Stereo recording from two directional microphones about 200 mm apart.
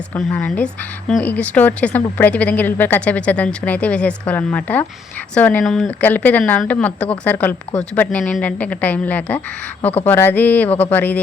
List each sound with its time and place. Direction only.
0.1 s a woman's voice: 5° left (ahead or behind)